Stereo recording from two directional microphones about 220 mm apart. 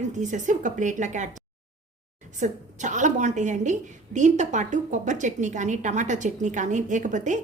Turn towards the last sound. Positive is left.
turn(degrees=-35)  # may be behind; listen again after turning